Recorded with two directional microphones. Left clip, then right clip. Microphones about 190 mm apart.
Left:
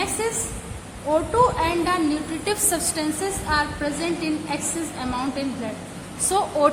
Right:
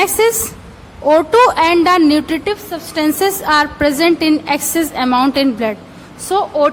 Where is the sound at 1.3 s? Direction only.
45° right (ahead or behind).